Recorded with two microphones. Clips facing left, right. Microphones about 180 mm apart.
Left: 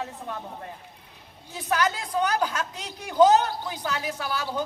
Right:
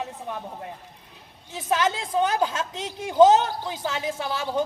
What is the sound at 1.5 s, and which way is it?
A woman's voice, 25° right (ahead or behind).